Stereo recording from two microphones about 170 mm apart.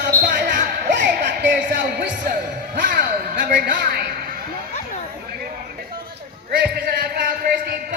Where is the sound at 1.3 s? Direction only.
90° right.